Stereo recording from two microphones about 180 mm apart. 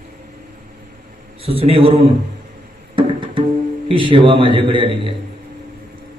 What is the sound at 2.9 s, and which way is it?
Music, 30° right (ahead or behind).